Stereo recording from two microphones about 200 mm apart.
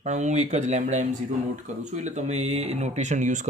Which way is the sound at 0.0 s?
35° right (ahead or behind).